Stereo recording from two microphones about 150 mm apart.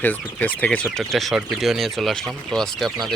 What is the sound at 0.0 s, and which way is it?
Speech, 10° left (ahead or behind).